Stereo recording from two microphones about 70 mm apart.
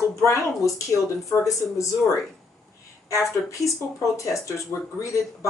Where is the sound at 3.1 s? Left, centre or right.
Left.